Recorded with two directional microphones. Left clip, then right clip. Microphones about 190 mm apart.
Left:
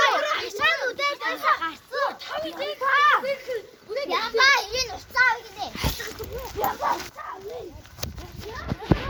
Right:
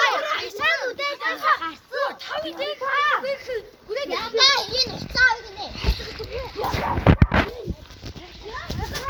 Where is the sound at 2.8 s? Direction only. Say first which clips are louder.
Left 3 dB; 60° left (ahead or behind).